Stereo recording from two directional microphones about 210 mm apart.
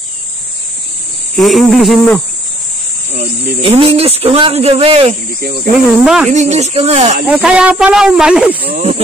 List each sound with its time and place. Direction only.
1.3 s speech: centre (ahead or behind)
3.2 s speech: 30° right (ahead or behind)
6.0 s speech: centre (ahead or behind)
6.3 s speech: 35° right (ahead or behind)
7.2 s speech: 5° right (ahead or behind)
8.7 s speech: 30° right (ahead or behind)